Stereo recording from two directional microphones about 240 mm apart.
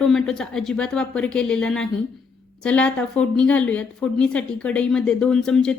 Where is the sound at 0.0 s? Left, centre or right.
Centre.